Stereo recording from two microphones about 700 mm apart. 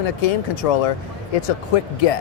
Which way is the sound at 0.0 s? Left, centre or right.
Left.